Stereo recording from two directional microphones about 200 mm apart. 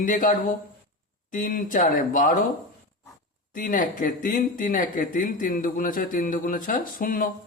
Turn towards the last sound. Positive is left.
turn(degrees=45)  # may be behind; listen again after turning